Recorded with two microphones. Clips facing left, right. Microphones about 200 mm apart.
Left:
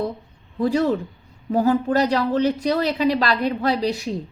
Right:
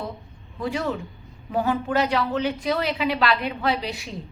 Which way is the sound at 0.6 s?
40° left (ahead or behind).